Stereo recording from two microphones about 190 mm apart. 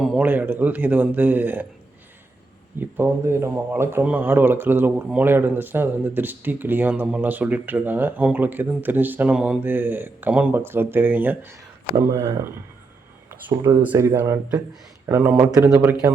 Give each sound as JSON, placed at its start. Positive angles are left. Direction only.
{"t": 0.0, "sound": "speech", "side_deg": -5}
{"t": 2.7, "sound": "speech", "side_deg": -10}
{"t": 13.5, "sound": "speech", "side_deg": -25}
{"t": 13.7, "sound": "speech", "side_deg": -10}